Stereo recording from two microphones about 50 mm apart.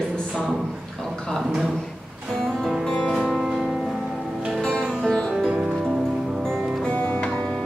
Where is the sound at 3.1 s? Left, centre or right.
Centre.